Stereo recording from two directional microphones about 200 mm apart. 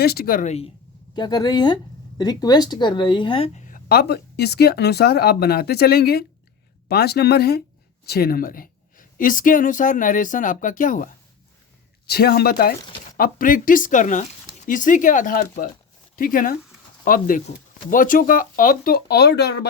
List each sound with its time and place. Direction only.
0.0 s speech: 50° left (ahead or behind); by 0.7 s 35° left (ahead or behind)
1.1 s a woman's voice: 20° left (ahead or behind)
3.7 s a woman's voice: 50° left (ahead or behind)